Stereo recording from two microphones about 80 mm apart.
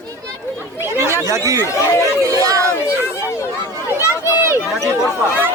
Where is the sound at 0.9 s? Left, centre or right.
Right.